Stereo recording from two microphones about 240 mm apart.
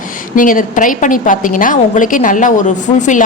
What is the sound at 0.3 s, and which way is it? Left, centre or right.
A woman's voice, left.